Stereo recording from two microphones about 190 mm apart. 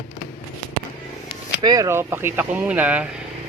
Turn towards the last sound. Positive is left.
turn(degrees=-5)  # may be behind; listen again after turning